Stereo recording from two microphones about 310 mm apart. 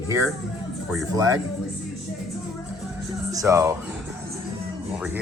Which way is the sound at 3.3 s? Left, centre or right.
Centre.